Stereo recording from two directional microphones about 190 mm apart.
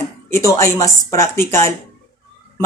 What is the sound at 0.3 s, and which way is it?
Speech, 15° left (ahead or behind).